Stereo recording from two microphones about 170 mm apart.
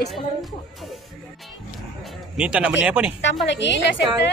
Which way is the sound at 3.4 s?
90° left.